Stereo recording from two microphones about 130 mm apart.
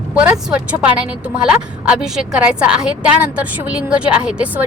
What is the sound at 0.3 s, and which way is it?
A woman's voice, 10° right (ahead or behind).